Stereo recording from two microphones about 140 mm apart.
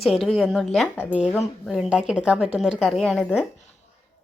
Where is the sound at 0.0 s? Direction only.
Centre (ahead or behind).